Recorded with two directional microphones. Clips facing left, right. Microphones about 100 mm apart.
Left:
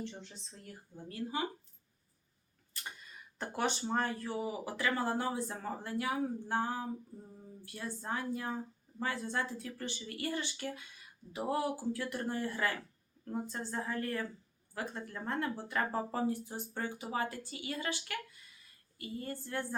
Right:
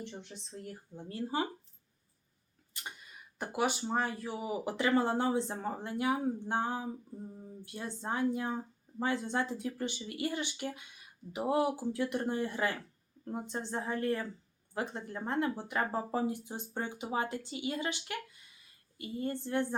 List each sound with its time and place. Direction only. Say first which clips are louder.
0.0 s speech: even; 15° right (ahead or behind)
2.8 s a sound: right 1 dB; 20° right (ahead or behind)
3.3 s speech: right 2 dB; 10° right (ahead or behind)